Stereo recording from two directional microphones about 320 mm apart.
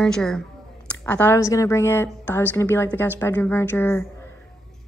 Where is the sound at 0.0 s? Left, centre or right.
Centre.